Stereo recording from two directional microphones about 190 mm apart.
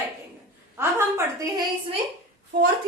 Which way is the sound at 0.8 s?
15° right (ahead or behind).